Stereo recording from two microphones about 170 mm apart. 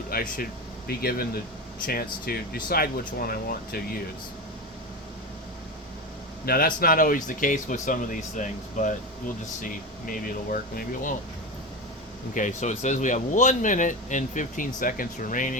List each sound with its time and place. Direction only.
0.1 s speech: 60° left (ahead or behind)
6.4 s speech: 60° left (ahead or behind)
12.3 s speech: 50° left (ahead or behind)